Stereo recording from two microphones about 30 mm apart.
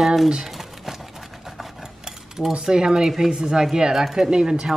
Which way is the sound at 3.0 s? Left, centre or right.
Centre.